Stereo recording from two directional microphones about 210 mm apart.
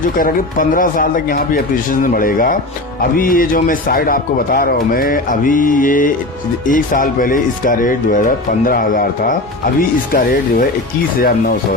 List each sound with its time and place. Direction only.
0.2 s a man's voice: 40° left (ahead or behind)